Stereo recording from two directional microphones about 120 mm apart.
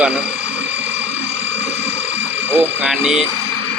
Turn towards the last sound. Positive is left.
turn(degrees=-5)  # may be behind; listen again after turning